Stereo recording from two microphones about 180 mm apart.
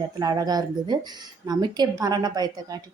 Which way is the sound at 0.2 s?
20° right (ahead or behind).